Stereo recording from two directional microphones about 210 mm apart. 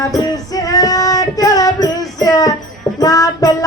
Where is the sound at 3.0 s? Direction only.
15° left (ahead or behind).